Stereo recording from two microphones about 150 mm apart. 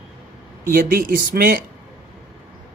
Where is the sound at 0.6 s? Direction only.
70° right (ahead or behind).